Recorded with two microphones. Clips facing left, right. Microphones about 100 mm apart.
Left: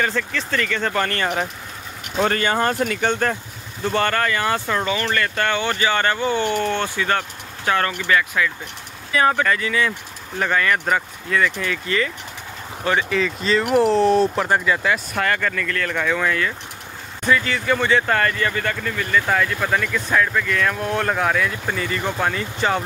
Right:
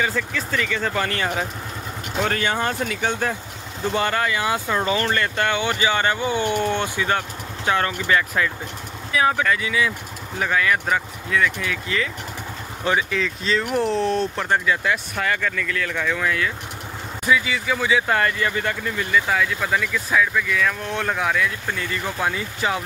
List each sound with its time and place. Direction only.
0.0 s speech: 5° right (ahead or behind)
4.8 s speech: 30° right (ahead or behind)
9.1 s speech: centre (ahead or behind)
19.2 s speech: centre (ahead or behind)